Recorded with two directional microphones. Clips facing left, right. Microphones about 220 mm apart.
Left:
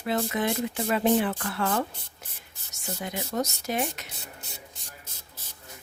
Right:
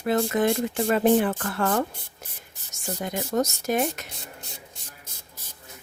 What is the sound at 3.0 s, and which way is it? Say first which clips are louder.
Speech: right 5 dB; 45° right (ahead or behind).